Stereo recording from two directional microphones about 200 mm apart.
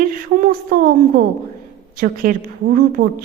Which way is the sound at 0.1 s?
45° right (ahead or behind).